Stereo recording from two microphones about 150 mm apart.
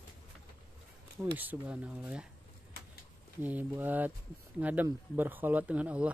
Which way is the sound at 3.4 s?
10° right (ahead or behind).